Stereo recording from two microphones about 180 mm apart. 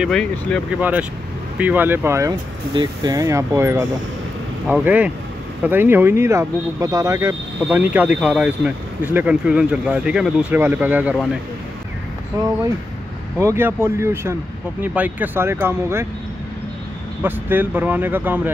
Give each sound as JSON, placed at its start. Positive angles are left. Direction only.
{"t": 0.0, "sound": "speech", "side_deg": 5}
{"t": 0.7, "sound": "speech", "side_deg": -10}
{"t": 13.4, "sound": "speech", "side_deg": -15}
{"t": 17.2, "sound": "speech", "side_deg": -10}